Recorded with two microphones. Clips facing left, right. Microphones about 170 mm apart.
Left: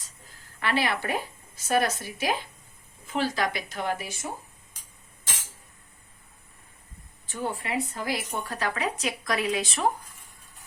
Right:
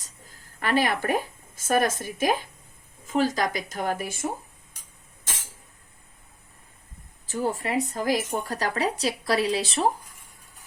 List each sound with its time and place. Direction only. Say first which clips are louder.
0.0 s a woman's voice: right 2 dB; 45° right (ahead or behind)
7.3 s speech: right 4 dB; 35° right (ahead or behind)